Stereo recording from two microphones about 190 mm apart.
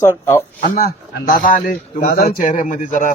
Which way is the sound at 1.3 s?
50° left (ahead or behind).